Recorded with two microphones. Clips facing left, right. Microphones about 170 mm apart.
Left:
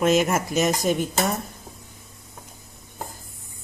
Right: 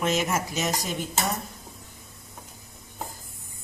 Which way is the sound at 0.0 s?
50° left (ahead or behind).